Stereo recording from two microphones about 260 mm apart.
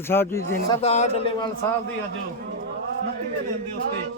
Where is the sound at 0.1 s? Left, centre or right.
Centre.